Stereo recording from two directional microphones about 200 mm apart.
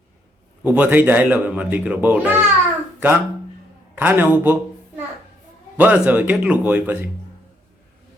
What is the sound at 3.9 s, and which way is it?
Speech, 10° right (ahead or behind).